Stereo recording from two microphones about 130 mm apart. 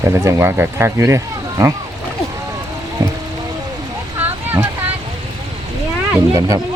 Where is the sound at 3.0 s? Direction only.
25° right (ahead or behind).